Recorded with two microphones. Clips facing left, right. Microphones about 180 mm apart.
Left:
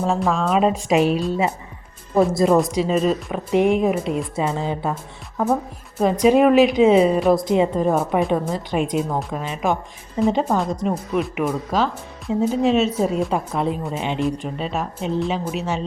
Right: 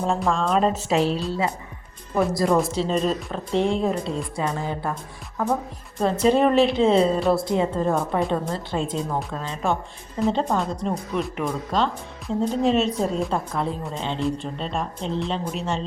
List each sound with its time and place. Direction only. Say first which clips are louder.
0.0 s speech: left 2 dB; 5° left (ahead or behind); by 2.6 s 25° left (ahead or behind)
2.6 s speech: left 4 dB; 10° left (ahead or behind)
6.0 s speech: left 4 dB; 10° left (ahead or behind)
13.3 s speech: left 3 dB; 20° left (ahead or behind)